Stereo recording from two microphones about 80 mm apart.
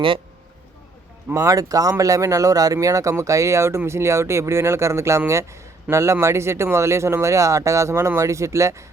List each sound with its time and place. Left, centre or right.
1.3 s speech: right